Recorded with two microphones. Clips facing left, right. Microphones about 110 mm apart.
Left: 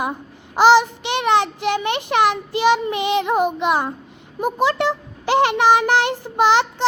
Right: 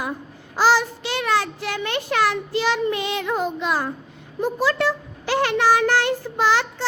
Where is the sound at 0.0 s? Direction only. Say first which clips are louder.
Left 4 dB; 20° left (ahead or behind).